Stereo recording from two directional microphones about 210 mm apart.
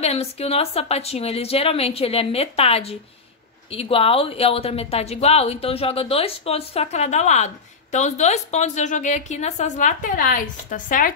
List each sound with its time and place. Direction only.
0.0 s a woman's voice: 30° left (ahead or behind)